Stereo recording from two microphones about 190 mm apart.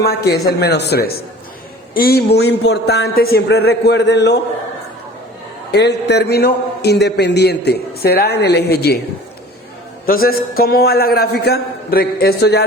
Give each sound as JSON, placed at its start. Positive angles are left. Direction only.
{"t": 0.0, "sound": "a man's voice", "side_deg": 55}
{"t": 5.7, "sound": "a man's voice", "side_deg": 60}
{"t": 10.1, "sound": "a man's voice", "side_deg": 50}